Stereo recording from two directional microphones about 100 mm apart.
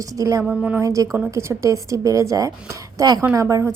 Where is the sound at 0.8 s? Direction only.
35° right (ahead or behind).